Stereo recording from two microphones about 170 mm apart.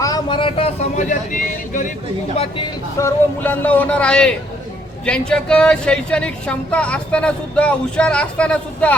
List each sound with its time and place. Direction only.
0.0 s speech: 25° left (ahead or behind); by 1.9 s 50° left (ahead or behind)
2.3 s speech: 35° left (ahead or behind)
3.0 s a woman's voice: 10° left (ahead or behind)